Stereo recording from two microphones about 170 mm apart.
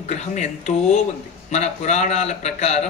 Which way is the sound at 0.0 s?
40° left (ahead or behind).